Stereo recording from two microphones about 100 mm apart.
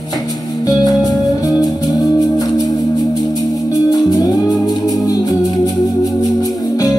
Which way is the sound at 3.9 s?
40° left (ahead or behind).